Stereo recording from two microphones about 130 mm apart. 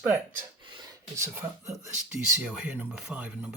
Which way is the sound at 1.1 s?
20° right (ahead or behind).